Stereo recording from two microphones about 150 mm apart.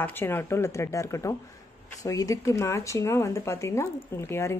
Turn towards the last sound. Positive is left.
turn(degrees=15)  # may be behind; listen again after turning